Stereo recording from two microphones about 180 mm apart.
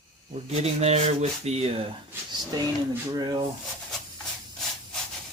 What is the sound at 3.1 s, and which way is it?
Rub, 25° right (ahead or behind).